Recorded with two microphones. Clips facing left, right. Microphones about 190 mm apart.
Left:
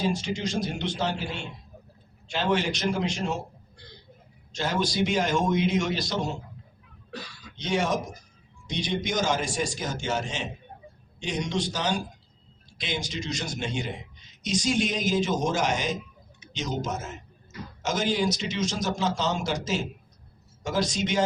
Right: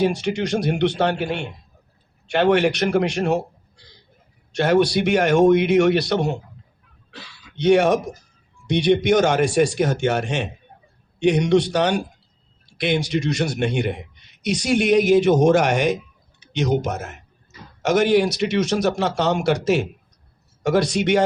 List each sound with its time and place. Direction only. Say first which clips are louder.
0.0 s a man's voice: right 7 dB; 65° right (ahead or behind)
4.5 s a man's voice: right 10 dB; 65° right (ahead or behind)
7.1 s a sound: left 3 dB; 40° left (ahead or behind)
7.5 s a man's voice: right 11 dB; 65° right (ahead or behind)